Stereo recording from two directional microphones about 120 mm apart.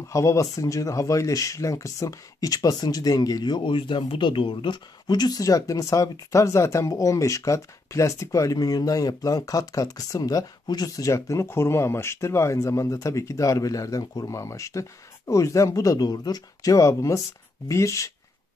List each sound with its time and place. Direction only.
0.1 s speech: 25° left (ahead or behind)